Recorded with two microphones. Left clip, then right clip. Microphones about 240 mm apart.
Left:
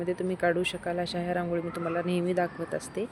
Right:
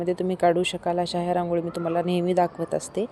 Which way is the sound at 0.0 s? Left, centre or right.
Right.